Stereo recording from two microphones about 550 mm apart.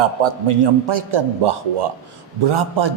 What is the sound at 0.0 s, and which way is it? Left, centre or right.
A man's voice, right.